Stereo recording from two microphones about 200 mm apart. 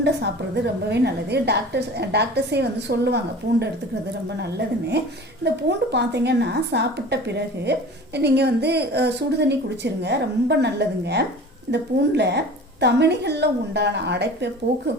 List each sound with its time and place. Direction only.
0.0 s a woman's voice: 55° right (ahead or behind)
4.4 s a woman's voice: 55° right (ahead or behind)